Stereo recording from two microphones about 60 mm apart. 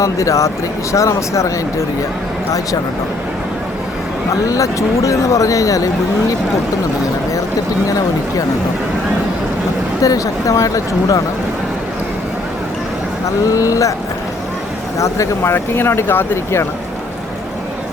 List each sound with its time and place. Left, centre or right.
0.0 s speech: left
4.4 s speech: left
7.9 s speech: left
10.0 s speech: left
13.4 s speech: left
14.9 s speech: left
15.5 s speech: left